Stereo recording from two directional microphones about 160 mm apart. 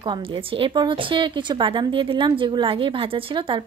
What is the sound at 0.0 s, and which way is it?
A woman's voice, 30° right (ahead or behind).